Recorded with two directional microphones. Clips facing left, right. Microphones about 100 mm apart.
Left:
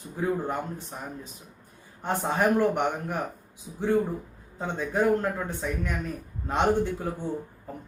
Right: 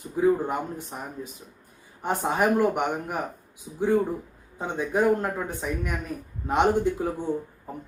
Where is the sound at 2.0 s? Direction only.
15° right (ahead or behind).